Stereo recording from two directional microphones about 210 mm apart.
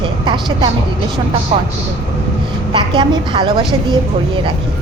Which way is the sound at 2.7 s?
25° right (ahead or behind).